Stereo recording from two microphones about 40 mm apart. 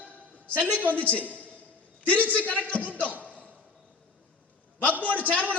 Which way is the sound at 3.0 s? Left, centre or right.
Left.